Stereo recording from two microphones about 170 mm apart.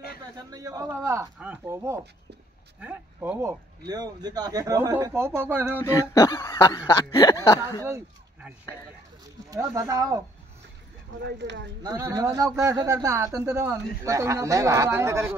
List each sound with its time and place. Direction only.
0.5 s speech: 20° right (ahead or behind)
5.8 s speech: 20° left (ahead or behind)
7.8 s a sound: 10° right (ahead or behind)
9.5 s a man's voice: 20° right (ahead or behind)
11.2 s speech: 90° right
11.8 s a man's voice: 20° right (ahead or behind)